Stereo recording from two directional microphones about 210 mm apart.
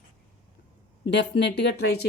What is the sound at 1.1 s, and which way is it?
Speech, 55° left (ahead or behind).